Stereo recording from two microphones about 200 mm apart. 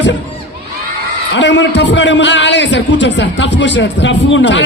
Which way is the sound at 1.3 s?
65° left (ahead or behind).